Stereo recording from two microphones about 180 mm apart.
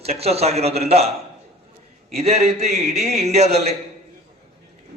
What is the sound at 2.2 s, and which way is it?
A man's voice, 35° right (ahead or behind).